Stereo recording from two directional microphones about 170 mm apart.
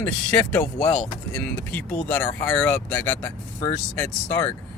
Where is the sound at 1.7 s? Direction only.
10° left (ahead or behind).